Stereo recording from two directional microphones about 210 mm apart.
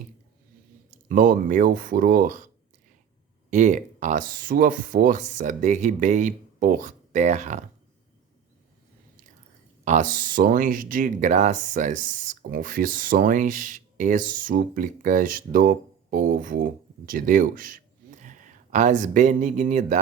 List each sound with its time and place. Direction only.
1.0 s speech: 40° right (ahead or behind)
3.5 s speech: 35° right (ahead or behind)
9.8 s speech: 35° right (ahead or behind)